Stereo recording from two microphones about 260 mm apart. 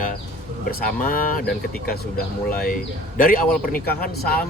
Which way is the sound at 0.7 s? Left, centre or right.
Left.